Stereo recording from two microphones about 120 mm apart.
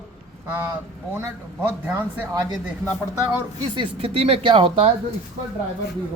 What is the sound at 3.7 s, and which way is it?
Speech, 45° right (ahead or behind).